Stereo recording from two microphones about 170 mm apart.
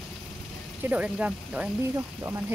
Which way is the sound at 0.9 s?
5° right (ahead or behind).